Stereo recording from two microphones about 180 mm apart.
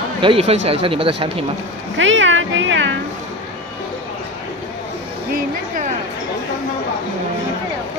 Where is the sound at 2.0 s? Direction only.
90° right.